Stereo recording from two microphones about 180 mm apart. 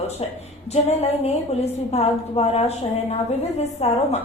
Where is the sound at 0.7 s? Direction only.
35° left (ahead or behind).